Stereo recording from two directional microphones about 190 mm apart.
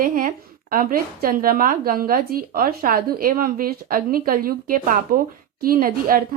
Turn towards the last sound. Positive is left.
turn(degrees=-50)  # may be behind; listen again after turning